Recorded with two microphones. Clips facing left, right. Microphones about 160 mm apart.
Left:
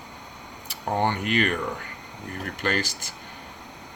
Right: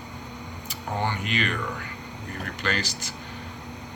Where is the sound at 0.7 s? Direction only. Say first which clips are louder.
Left 4 dB; 55° left (ahead or behind).